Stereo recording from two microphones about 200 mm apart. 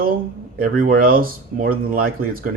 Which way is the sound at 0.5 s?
45° right (ahead or behind).